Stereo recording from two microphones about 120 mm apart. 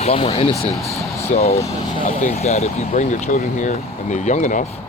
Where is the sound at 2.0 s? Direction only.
80° left.